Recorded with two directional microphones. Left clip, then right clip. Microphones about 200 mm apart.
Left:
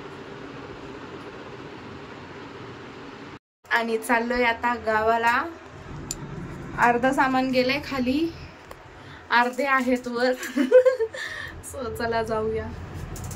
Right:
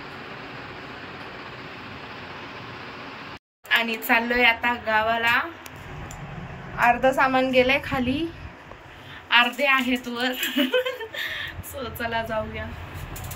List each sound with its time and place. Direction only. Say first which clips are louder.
3.7 s a woman's voice: right 2 dB; 20° left (ahead or behind)
6.8 s a woman's voice: right 1 dB; 15° left (ahead or behind)
9.3 s a woman's voice: right 2 dB; 35° left (ahead or behind)
10.4 s laughter: left 7 dB; 25° left (ahead or behind)
12.0 s a woman's voice: left 2 dB; 25° left (ahead or behind)